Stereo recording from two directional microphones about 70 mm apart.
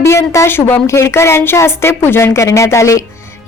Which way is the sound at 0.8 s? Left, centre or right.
Left.